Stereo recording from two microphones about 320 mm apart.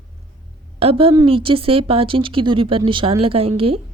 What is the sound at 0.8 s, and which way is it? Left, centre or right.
Speech, centre.